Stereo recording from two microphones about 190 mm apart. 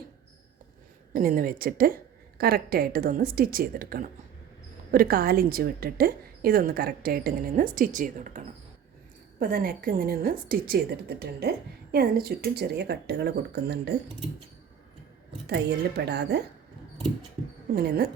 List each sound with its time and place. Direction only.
1.1 s a woman's voice: 50° right (ahead or behind)
9.4 s a woman's voice: 50° right (ahead or behind)
15.4 s a woman's voice: 60° right (ahead or behind)
17.7 s a woman's voice: 55° right (ahead or behind)